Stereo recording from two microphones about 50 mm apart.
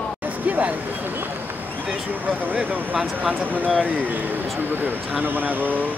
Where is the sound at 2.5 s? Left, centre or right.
Right.